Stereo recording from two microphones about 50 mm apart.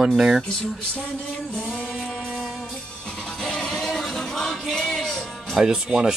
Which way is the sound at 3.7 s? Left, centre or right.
Centre.